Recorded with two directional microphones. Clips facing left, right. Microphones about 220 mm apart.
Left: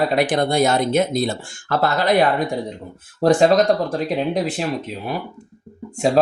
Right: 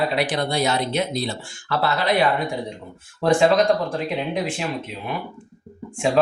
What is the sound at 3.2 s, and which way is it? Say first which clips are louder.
Speech: left 3 dB; 40° left (ahead or behind).